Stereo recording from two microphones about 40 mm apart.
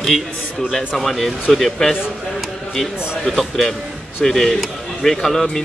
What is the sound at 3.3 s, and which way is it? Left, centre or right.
Speech, centre.